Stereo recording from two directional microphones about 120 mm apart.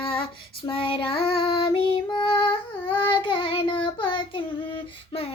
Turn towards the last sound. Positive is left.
turn(degrees=50)  # may be behind; listen again after turning